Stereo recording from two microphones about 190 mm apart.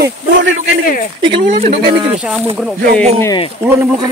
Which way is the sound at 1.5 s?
35° right (ahead or behind).